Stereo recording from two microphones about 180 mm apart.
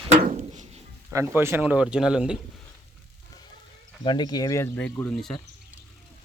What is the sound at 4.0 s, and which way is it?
Speech, 25° left (ahead or behind).